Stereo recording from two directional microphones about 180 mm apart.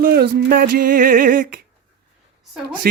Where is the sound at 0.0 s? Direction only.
60° right (ahead or behind).